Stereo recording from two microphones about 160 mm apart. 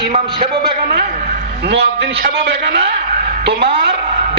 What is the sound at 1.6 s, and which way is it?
A man's voice, 90° right.